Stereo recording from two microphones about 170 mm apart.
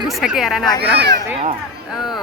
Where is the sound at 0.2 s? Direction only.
Centre (ahead or behind).